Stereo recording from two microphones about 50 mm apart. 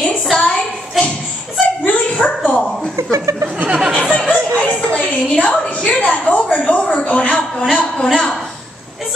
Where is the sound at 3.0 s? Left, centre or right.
Right.